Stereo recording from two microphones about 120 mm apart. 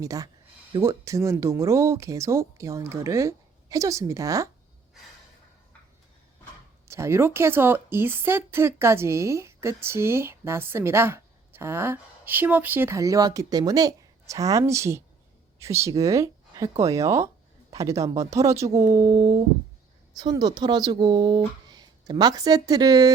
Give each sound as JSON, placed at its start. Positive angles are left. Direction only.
{"t": 0.0, "sound": "a woman's voice", "side_deg": -30}
{"t": 6.8, "sound": "a woman's voice", "side_deg": -25}